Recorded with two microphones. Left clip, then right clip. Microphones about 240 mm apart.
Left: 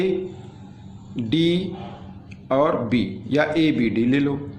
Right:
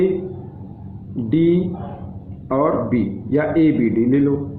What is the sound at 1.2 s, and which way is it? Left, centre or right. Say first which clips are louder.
A man's voice: right 4 dB; left.